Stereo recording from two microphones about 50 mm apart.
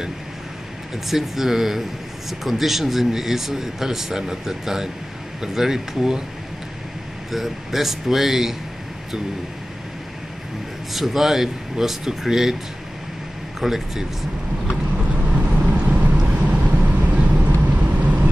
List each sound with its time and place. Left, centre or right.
1.0 s speech: centre
7.2 s speech: centre
10.9 s speech: centre
13.6 s speech: centre
15.0 s vehicle: right